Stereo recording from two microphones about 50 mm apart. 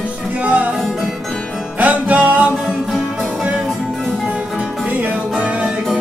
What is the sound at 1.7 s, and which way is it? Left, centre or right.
Music, right.